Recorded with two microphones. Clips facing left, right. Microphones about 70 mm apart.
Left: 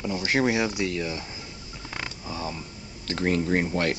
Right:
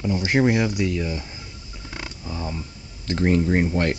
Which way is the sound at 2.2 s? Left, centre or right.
Centre.